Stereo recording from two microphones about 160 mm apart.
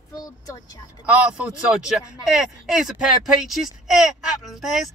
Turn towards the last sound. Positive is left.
turn(degrees=0)  # may be behind; listen again after turning